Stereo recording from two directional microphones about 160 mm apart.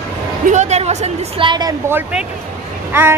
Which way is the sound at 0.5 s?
45° right (ahead or behind).